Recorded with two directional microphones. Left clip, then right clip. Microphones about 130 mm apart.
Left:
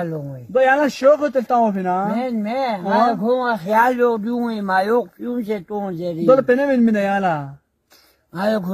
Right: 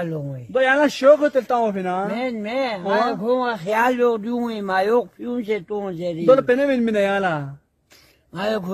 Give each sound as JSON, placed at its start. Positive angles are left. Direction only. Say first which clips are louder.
{"t": 0.0, "sound": "a man's voice", "louder": "left 1 dB", "side_deg": -20}